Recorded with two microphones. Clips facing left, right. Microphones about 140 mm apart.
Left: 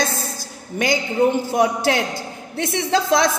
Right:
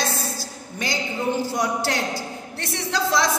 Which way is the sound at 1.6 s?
55° left (ahead or behind).